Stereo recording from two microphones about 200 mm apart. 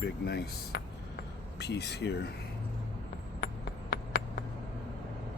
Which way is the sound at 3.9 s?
50° left (ahead or behind).